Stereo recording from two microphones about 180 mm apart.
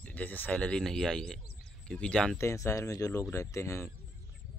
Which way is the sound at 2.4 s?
15° left (ahead or behind).